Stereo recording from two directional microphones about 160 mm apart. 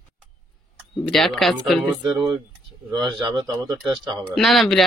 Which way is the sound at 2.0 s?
25° right (ahead or behind).